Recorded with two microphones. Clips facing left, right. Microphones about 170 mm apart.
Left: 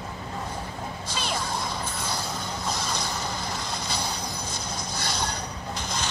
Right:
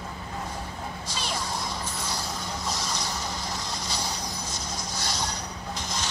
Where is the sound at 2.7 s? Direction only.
55° left (ahead or behind).